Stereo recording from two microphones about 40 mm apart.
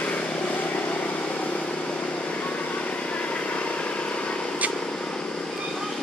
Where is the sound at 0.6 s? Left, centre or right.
Left; by 5.2 s centre.